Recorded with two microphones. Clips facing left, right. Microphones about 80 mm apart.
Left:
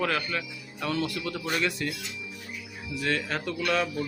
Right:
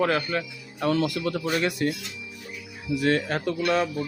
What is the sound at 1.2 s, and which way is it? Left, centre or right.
Speech, right.